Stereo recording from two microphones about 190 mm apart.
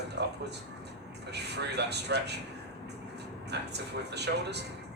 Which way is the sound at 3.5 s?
60° right (ahead or behind).